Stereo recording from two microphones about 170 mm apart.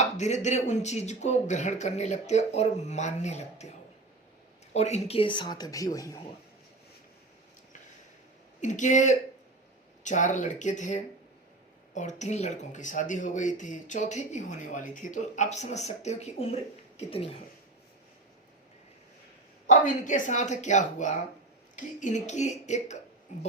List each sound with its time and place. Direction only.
0.0 s speech: 45° left (ahead or behind)
4.7 s speech: 40° left (ahead or behind); by 6.2 s 20° left (ahead or behind)
8.6 s speech: 45° left (ahead or behind)
19.6 s speech: 45° left (ahead or behind)